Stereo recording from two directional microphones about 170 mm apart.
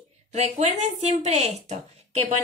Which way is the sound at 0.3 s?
40° right (ahead or behind).